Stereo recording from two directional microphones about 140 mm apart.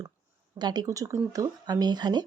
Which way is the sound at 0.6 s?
30° right (ahead or behind).